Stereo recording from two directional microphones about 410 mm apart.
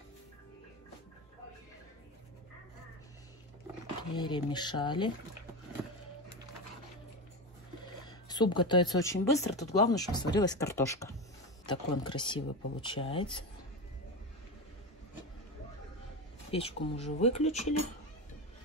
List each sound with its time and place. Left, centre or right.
4.1 s speech: centre
8.3 s speech: centre
16.4 s speech: centre